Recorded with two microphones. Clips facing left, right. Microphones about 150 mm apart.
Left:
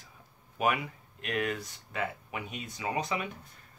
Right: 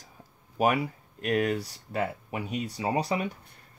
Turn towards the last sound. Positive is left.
turn(degrees=-35)  # may be behind; listen again after turning